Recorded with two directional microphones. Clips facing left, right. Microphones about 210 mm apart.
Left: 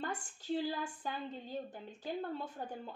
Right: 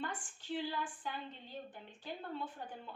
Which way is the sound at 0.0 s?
40° left (ahead or behind).